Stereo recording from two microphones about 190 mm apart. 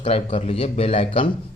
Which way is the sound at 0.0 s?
30° left (ahead or behind).